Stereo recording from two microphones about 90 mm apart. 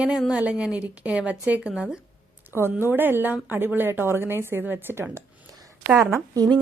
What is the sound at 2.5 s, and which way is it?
A woman's voice, 25° right (ahead or behind).